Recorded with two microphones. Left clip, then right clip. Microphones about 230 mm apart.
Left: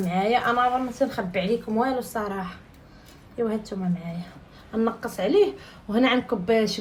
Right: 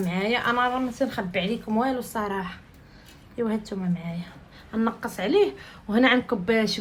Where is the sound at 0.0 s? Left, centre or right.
Right.